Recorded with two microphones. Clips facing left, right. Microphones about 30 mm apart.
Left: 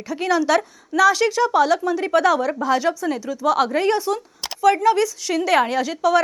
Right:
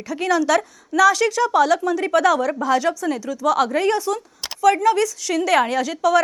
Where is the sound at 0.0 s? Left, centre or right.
Centre.